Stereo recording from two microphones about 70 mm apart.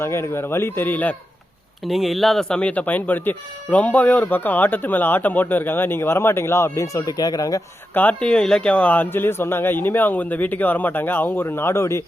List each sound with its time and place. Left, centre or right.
0.0 s speech: left
1.8 s speech: centre
2.6 s speech: centre; by 7.6 s left
7.9 s speech: left
8.3 s speech: centre; by 12.0 s left